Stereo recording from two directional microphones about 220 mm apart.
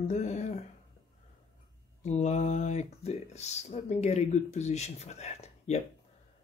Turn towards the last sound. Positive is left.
turn(degrees=30)  # may be behind; listen again after turning